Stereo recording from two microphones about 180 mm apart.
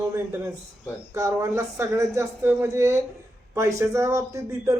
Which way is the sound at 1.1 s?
15° right (ahead or behind).